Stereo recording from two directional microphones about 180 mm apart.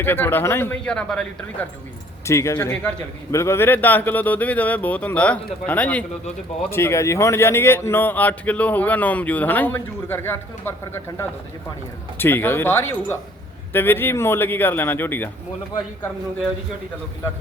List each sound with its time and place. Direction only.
0.0 s a man's voice: 10° left (ahead or behind)
2.2 s a man's voice: 15° left (ahead or behind)